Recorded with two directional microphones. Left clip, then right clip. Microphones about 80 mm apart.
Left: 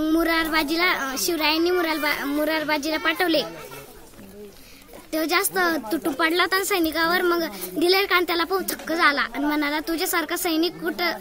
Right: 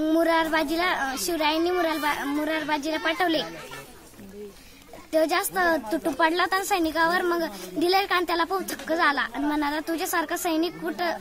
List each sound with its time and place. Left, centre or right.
0.0 s speech: right
5.1 s speech: right